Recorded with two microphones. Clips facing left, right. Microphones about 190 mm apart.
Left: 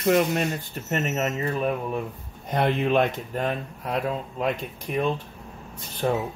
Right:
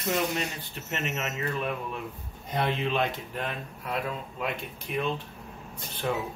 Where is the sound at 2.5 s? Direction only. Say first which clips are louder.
Left 6 dB; 55° left (ahead or behind).